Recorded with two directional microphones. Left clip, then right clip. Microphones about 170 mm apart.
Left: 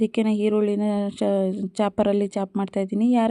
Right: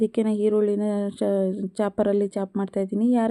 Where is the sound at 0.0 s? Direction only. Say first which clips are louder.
Even; 30° left (ahead or behind).